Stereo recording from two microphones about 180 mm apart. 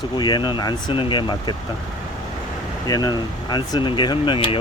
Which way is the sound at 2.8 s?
20° left (ahead or behind).